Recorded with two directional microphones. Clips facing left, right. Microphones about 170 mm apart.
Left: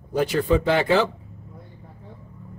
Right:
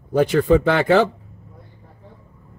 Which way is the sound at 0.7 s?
60° right (ahead or behind).